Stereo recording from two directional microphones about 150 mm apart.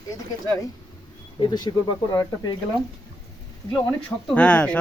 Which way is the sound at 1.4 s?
25° left (ahead or behind).